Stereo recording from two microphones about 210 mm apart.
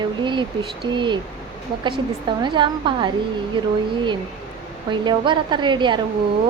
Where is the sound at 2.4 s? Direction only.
20° right (ahead or behind).